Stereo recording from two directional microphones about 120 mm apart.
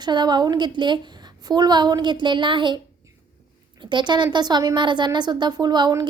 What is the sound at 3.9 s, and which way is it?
A woman's voice, 40° right (ahead or behind).